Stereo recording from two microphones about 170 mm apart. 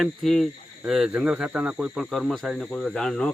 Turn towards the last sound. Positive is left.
turn(degrees=5)  # may be behind; listen again after turning